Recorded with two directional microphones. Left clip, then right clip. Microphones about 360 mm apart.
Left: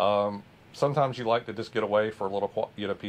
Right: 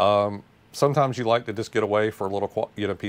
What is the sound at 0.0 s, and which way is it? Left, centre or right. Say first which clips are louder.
Speech: right 5 dB; right.